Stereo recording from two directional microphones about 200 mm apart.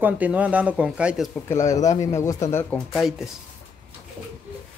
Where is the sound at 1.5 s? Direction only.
15° left (ahead or behind).